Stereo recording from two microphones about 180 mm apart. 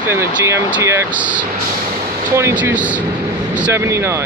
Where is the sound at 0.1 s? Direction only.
15° right (ahead or behind).